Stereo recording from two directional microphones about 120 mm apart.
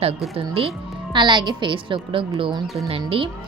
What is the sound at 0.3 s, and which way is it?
Speech, 50° right (ahead or behind).